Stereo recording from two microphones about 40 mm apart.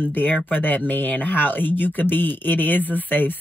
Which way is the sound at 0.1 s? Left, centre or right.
Left.